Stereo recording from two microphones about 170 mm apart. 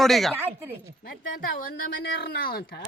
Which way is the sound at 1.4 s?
60° left (ahead or behind).